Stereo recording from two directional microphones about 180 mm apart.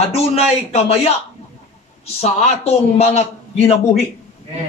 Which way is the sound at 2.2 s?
35° left (ahead or behind).